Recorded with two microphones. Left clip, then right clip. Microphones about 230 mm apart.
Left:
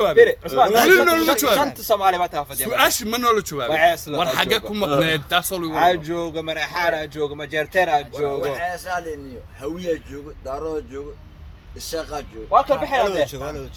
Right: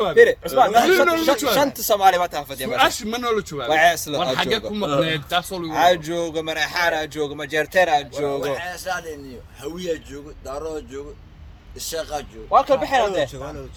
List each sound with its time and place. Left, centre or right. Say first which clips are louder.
0.2 s speech: right 2 dB; right
0.9 s a man's voice: left 2 dB; left
1.5 s speech: right 1 dB; right
2.6 s a man's voice: even; left
3.7 s a man's voice: right 2 dB; right
4.2 s a man's voice: left 4 dB; left
5.7 s a man's voice: right 1 dB; right
8.5 s speech: left 2 dB; right
12.5 s speech: right 1 dB; right
13.3 s speech: left 3 dB; left